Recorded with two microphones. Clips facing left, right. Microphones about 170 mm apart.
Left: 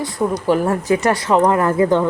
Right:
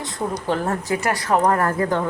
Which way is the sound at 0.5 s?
15° left (ahead or behind).